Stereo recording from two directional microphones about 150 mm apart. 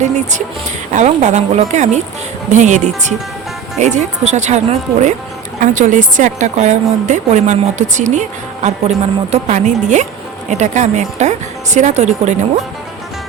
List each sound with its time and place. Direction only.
0.0 s a woman's voice: 55° right (ahead or behind)